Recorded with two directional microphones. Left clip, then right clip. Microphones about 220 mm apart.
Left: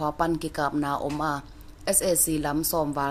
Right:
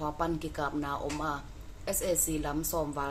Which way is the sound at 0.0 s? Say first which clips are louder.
Left 7 dB; 45° left (ahead or behind).